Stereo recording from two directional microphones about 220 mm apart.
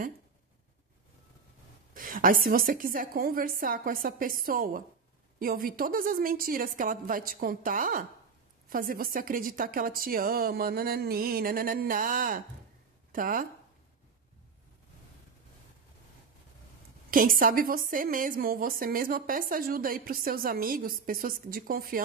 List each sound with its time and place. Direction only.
2.0 s a woman's voice: 40° right (ahead or behind)
17.1 s a woman's voice: 40° right (ahead or behind)